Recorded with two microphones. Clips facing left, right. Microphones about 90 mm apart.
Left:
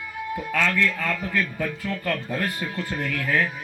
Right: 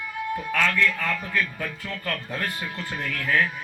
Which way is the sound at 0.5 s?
25° left (ahead or behind).